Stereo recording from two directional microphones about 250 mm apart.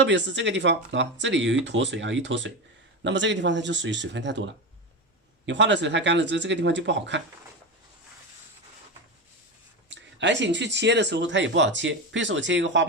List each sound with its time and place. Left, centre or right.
0.0 s speech: right
5.5 s speech: right
9.9 s speech: right